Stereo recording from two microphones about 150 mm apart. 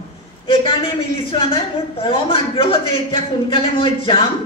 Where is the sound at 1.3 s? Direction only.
35° left (ahead or behind).